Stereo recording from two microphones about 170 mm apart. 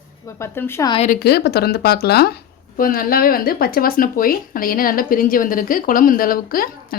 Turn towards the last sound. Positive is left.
turn(degrees=60)  # may be behind; listen again after turning